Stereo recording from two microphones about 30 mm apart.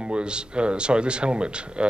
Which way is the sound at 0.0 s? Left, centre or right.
Right.